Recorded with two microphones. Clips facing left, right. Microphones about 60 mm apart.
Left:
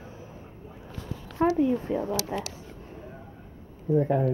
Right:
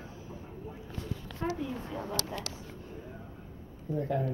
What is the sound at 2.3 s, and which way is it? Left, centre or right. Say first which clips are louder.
Speech: left 7 dB; left.